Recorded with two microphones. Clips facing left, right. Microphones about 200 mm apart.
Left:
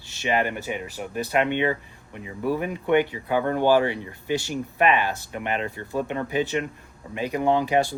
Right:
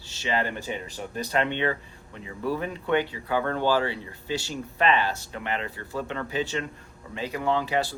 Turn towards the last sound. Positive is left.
turn(degrees=15)  # may be behind; listen again after turning